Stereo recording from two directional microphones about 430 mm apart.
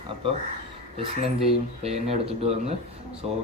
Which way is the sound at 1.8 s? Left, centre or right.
Centre.